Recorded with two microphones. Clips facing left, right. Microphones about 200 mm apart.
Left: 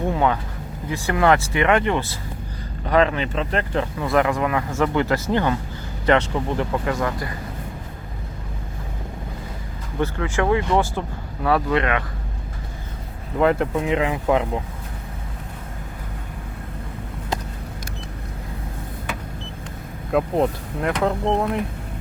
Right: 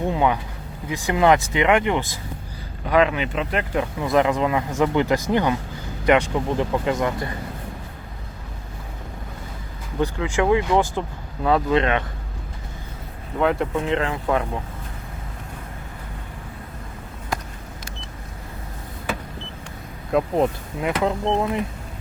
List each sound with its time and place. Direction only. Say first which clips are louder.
0.1 s a sound: even; 15° right (ahead or behind)
0.9 s speech: right 1 dB; 15° right (ahead or behind)
10.0 s speech: right 1 dB; 15° right (ahead or behind)
13.4 s speech: left 2 dB; centre (ahead or behind)
13.8 s speech: left 2 dB; 15° left (ahead or behind)
20.1 s speech: even; centre (ahead or behind)